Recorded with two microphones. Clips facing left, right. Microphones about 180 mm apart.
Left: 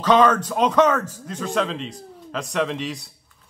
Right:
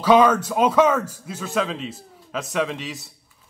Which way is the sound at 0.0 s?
10° right (ahead or behind).